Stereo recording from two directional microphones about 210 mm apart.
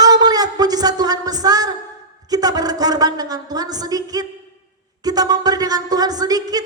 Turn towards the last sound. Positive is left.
turn(degrees=-15)  # may be behind; listen again after turning